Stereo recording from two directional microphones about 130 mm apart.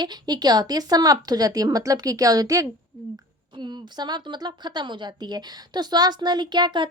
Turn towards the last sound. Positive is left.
turn(degrees=-35)  # may be behind; listen again after turning